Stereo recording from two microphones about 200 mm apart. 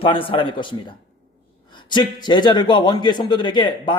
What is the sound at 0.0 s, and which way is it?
A man's voice, 25° left (ahead or behind).